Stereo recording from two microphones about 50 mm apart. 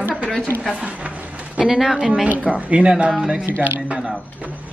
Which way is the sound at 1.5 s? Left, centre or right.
Centre.